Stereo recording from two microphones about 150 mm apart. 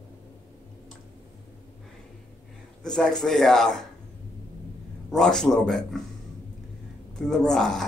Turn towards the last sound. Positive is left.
turn(degrees=5)  # may be behind; listen again after turning